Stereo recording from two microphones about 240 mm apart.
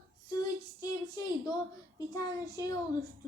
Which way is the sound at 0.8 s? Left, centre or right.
Centre.